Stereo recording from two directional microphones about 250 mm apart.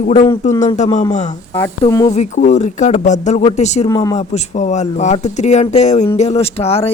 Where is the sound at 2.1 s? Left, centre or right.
Left.